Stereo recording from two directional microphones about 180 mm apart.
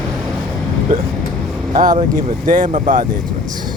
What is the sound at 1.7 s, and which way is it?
Speech, 45° right (ahead or behind).